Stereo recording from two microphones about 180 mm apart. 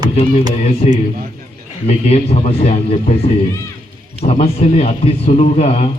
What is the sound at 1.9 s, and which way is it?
A man's voice, 35° left (ahead or behind).